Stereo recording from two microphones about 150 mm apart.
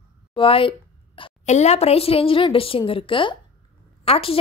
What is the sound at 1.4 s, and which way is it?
Speech, 50° left (ahead or behind).